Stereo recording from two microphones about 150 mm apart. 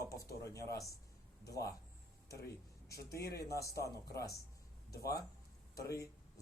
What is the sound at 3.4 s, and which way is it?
Speech, 20° left (ahead or behind).